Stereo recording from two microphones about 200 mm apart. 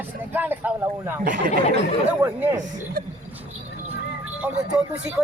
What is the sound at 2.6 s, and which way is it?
Speech, 40° right (ahead or behind).